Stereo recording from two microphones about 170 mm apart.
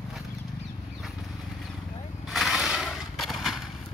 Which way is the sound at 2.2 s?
Centre (ahead or behind).